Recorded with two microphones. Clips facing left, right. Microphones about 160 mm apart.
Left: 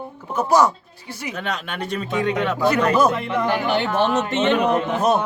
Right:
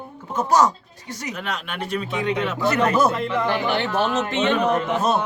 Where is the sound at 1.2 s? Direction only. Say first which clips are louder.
Left 2 dB; 35° left (ahead or behind).